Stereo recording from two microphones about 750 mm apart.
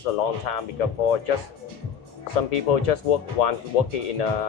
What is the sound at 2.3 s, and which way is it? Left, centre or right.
Speech, left.